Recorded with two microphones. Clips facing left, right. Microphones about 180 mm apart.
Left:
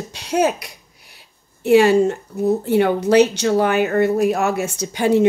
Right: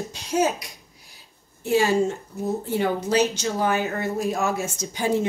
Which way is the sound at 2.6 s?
65° left (ahead or behind).